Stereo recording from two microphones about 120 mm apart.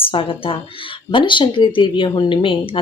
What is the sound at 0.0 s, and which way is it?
Speech, 45° left (ahead or behind).